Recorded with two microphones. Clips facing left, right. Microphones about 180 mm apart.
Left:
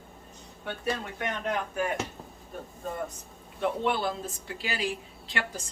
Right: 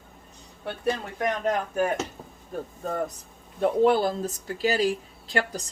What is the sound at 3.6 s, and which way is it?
Speech, 40° right (ahead or behind).